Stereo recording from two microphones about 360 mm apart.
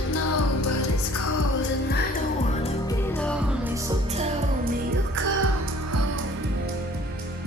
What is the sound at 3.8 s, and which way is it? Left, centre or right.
Music, centre.